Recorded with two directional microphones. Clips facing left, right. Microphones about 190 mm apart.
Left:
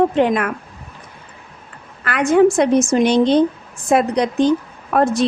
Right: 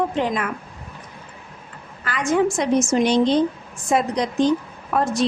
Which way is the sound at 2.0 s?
60° left (ahead or behind).